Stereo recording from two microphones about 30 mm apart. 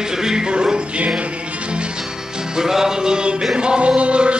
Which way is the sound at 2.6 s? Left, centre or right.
Centre.